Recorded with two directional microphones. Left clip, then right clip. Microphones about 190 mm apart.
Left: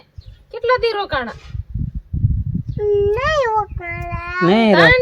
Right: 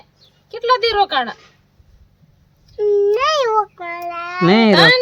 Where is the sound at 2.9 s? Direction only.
30° right (ahead or behind).